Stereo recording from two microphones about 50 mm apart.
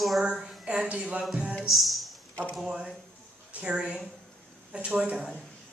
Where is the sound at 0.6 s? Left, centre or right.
Centre.